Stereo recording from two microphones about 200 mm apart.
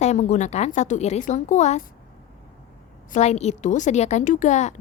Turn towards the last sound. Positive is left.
turn(degrees=35)  # may be behind; listen again after turning